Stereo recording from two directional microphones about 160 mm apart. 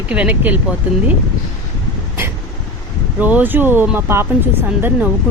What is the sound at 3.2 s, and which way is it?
Speech, 10° right (ahead or behind).